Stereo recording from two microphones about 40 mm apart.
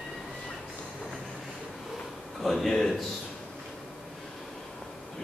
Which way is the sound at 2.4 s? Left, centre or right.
Centre.